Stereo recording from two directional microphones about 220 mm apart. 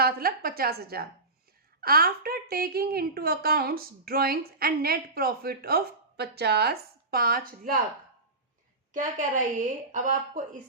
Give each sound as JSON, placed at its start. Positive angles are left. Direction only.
{"t": 0.0, "sound": "a woman's voice", "side_deg": -45}
{"t": 8.9, "sound": "a woman's voice", "side_deg": -35}